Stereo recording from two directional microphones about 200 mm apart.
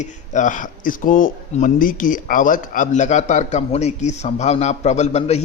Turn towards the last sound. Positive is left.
turn(degrees=35)  # may be behind; listen again after turning